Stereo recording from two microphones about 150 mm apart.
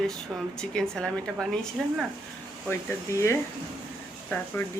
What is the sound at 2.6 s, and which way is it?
Speech, 20° left (ahead or behind).